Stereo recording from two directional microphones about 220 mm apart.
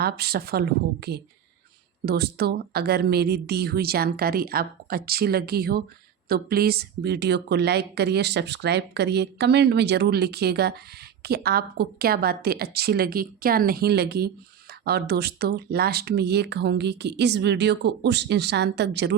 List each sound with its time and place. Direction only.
0.0 s speech: 45° right (ahead or behind)